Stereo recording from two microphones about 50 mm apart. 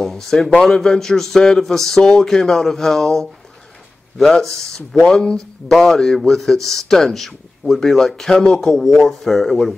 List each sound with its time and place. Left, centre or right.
0.0 s a man's voice: centre